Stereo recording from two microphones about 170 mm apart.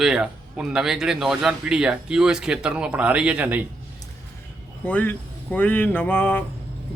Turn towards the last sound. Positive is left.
turn(degrees=10)  # may be behind; listen again after turning